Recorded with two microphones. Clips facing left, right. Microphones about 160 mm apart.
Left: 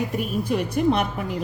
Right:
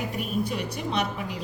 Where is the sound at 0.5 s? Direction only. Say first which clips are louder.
Left 8 dB; 50° left (ahead or behind).